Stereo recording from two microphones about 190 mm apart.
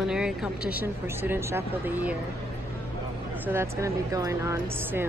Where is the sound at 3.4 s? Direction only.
15° right (ahead or behind).